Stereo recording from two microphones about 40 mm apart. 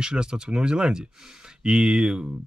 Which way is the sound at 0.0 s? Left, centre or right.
Right.